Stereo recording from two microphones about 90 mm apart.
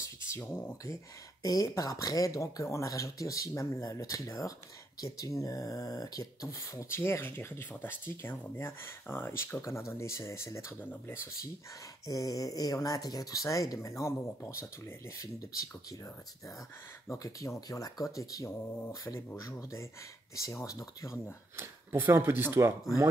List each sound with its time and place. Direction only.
0.0 s speech: 30° left (ahead or behind)
1.4 s speech: 40° left (ahead or behind)
12.1 s speech: 40° left (ahead or behind)
17.1 s speech: 35° left (ahead or behind)
21.5 s speech: 25° right (ahead or behind)